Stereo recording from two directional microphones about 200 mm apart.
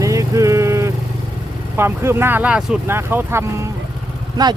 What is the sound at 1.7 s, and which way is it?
Speech, 10° right (ahead or behind).